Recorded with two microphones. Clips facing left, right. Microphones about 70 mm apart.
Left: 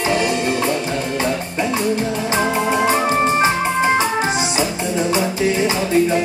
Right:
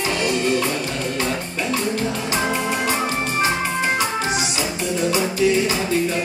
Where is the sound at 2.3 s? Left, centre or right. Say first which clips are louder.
Left 6 dB; left.